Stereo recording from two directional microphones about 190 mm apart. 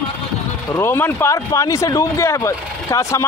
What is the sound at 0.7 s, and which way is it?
Speech, 10° left (ahead or behind).